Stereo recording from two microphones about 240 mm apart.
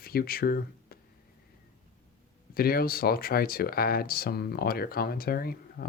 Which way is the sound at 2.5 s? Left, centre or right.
Left.